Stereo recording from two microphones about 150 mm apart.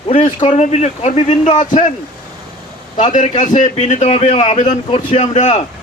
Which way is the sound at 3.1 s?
55° left (ahead or behind).